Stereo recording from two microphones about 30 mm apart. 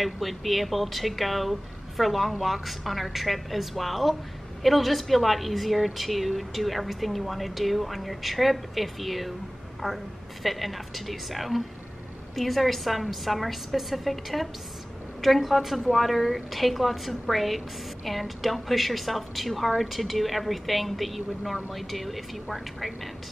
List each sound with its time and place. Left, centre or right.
0.0 s speech: centre